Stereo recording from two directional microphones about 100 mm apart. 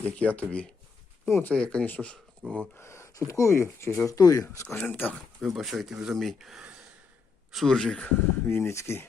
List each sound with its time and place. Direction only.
0.0 s speech: 15° left (ahead or behind)
2.4 s speech: centre (ahead or behind)
2.7 s speech: 25° left (ahead or behind)
4.4 s speech: 20° left (ahead or behind)
5.5 s speech: centre (ahead or behind)
8.2 s speech: 25° left (ahead or behind)